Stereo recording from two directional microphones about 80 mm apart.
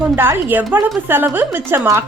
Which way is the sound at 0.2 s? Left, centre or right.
Right.